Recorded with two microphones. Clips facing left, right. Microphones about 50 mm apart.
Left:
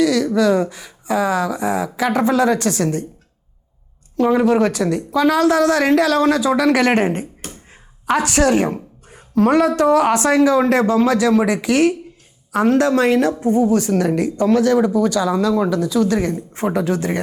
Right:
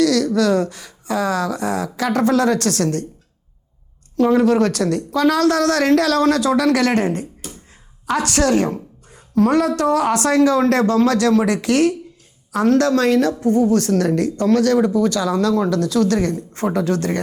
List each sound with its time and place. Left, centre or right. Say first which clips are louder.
0.0 s speech: left 1 dB; centre
4.2 s a woman's voice: even; centre